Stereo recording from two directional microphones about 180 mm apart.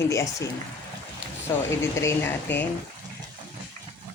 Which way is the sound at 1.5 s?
15° left (ahead or behind).